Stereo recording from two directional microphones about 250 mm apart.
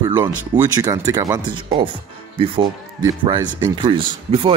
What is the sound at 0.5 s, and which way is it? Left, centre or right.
Speech, centre.